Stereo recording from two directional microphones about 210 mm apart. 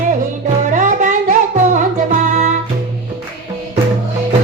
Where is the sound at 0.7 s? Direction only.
35° right (ahead or behind).